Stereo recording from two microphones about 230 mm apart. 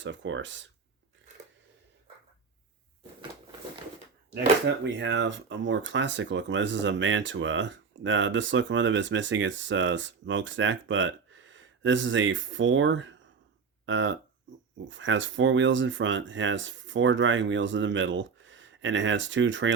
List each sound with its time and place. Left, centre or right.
0.0 s speech: right
4.6 s speech: right